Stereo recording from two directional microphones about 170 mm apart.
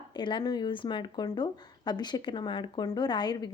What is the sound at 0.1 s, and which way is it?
A woman's voice, 25° left (ahead or behind).